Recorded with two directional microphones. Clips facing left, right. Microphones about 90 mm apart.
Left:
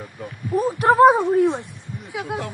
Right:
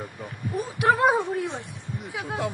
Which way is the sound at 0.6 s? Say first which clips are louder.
Left 4 dB; 35° left (ahead or behind).